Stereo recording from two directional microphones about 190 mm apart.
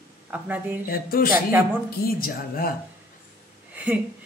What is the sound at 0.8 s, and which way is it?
Speech, 50° left (ahead or behind).